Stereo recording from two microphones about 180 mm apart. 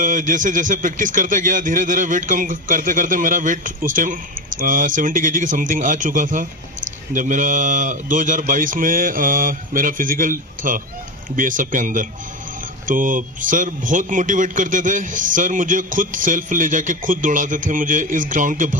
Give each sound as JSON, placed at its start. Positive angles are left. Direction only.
{"t": 0.0, "sound": "a man's voice", "side_deg": -45}